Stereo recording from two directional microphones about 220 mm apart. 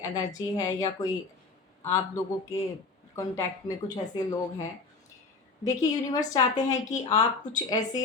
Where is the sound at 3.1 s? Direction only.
15° left (ahead or behind).